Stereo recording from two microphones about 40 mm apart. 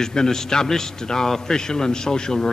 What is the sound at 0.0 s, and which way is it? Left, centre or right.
A man's voice, centre.